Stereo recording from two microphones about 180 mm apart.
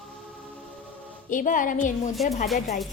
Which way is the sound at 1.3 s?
45° left (ahead or behind).